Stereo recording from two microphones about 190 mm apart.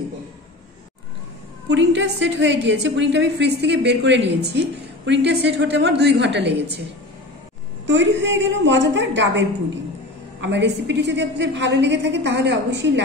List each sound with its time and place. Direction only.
1.7 s a woman's voice: 70° right (ahead or behind)
7.8 s a woman's voice: 70° right (ahead or behind)